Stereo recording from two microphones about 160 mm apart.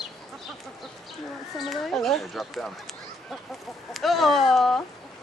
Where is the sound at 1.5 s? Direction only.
Centre (ahead or behind).